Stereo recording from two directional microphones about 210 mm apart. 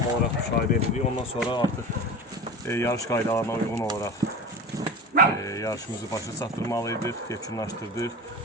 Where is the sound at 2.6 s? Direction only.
15° left (ahead or behind).